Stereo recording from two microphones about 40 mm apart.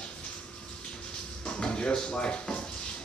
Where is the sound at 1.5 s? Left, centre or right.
Left.